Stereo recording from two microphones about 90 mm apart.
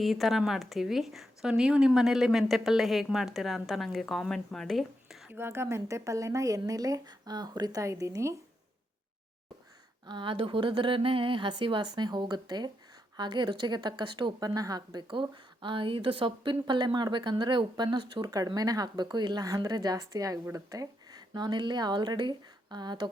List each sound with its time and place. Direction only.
0.0 s a woman's voice: centre (ahead or behind)
5.3 s speech: 25° right (ahead or behind); by 7.8 s 50° right (ahead or behind)
7.8 s speech: 35° right (ahead or behind)
10.1 s speech: 65° right (ahead or behind)
14.3 s speech: 45° right (ahead or behind)
15.1 s speech: 65° right (ahead or behind)
18.4 s speech: 45° right (ahead or behind)